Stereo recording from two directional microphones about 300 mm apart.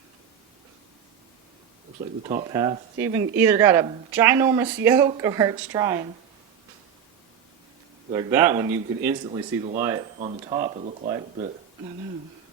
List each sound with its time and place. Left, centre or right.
2.2 s speech: centre
8.1 s speech: centre